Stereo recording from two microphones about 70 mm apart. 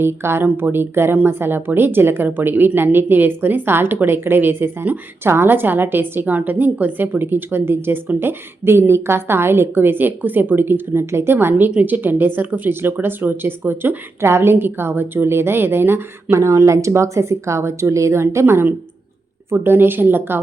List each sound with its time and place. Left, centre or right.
0.0 s speech: right